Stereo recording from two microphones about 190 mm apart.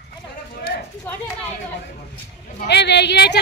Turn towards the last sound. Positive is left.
turn(degrees=60)  # may be behind; listen again after turning